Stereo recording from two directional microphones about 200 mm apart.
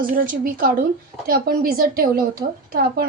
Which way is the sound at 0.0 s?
45° right (ahead or behind).